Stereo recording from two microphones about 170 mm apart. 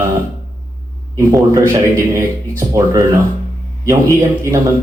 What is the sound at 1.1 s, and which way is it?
Speech, 20° right (ahead or behind).